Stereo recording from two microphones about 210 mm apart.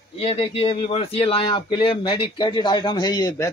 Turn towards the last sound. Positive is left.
turn(degrees=20)  # may be behind; listen again after turning